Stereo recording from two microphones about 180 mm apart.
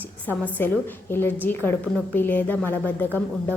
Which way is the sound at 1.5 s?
55° left (ahead or behind).